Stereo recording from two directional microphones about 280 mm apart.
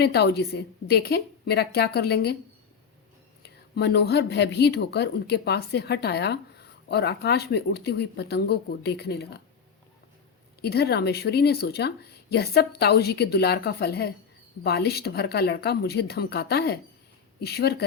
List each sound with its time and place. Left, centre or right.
0.0 s a woman's voice: left
3.4 s a woman's voice: left
10.6 s a woman's voice: left